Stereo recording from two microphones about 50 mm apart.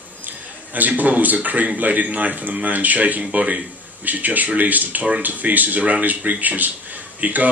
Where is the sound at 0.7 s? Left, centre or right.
Right.